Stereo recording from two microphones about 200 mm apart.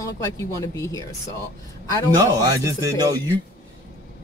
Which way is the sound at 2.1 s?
15° right (ahead or behind).